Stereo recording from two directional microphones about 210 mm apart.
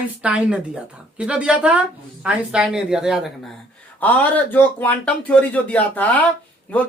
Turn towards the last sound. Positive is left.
turn(degrees=5)  # may be behind; listen again after turning